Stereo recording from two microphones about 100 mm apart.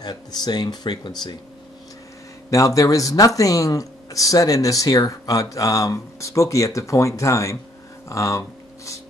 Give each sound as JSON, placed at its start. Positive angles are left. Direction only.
{"t": 0.0, "sound": "speech", "side_deg": 45}
{"t": 2.5, "sound": "speech", "side_deg": 35}